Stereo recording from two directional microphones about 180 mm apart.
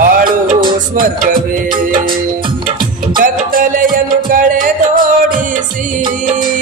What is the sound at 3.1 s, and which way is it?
Music, 50° right (ahead or behind).